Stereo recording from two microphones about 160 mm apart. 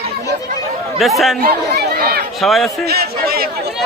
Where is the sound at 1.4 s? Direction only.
70° right (ahead or behind).